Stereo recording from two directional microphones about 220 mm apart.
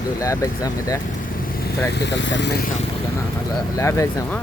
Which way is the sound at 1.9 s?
50° left (ahead or behind).